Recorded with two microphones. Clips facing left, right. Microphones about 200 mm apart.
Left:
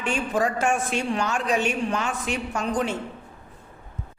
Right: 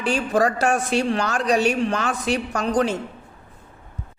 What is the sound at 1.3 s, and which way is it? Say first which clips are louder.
Speech: right 4 dB; 35° right (ahead or behind).